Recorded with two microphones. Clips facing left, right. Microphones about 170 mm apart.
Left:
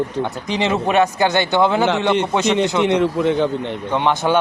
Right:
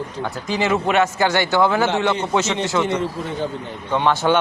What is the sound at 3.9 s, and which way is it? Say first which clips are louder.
Speech: even; 15° left (ahead or behind).